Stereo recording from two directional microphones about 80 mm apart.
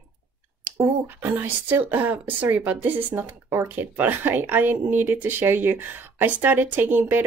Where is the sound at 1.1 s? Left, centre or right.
Right.